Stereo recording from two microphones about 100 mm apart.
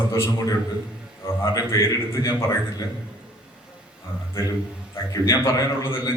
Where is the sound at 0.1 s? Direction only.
35° left (ahead or behind).